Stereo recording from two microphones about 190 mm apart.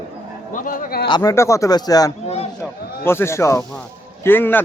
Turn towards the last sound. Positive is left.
turn(degrees=10)  # may be behind; listen again after turning